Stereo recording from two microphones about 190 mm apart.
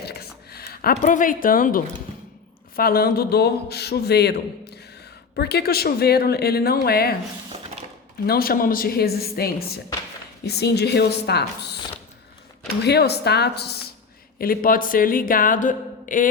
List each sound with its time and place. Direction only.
0.0 s a sound: 55° left (ahead or behind)
2.7 s a man's voice: 50° left (ahead or behind)
8.3 s a man's voice: 50° left (ahead or behind)
12.8 s a man's voice: 60° left (ahead or behind); by 16.3 s 45° left (ahead or behind)